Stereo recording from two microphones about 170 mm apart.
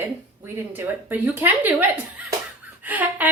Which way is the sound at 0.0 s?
10° right (ahead or behind).